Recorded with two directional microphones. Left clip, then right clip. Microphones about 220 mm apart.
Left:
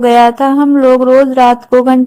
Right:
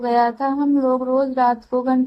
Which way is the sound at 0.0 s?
30° left (ahead or behind).